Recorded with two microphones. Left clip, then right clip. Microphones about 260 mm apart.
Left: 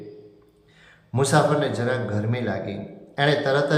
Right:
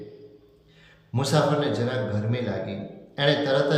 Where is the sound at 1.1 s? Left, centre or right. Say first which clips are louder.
Left 3 dB; centre.